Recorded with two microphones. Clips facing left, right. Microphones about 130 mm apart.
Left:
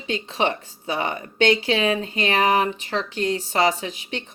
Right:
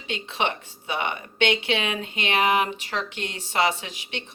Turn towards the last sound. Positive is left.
turn(degrees=35)  # may be behind; listen again after turning